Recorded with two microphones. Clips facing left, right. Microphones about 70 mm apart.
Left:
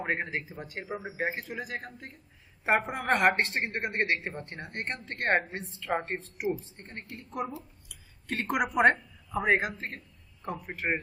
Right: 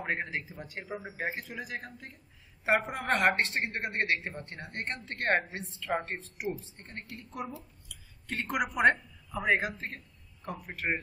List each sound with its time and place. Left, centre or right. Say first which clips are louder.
0.0 s a woman's voice: left 2 dB; centre
8.8 s a sound: right 1 dB; centre
9.4 s a man's voice: left 2 dB; centre